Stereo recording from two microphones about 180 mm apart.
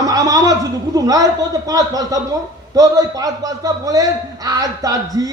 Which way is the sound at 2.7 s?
20° right (ahead or behind).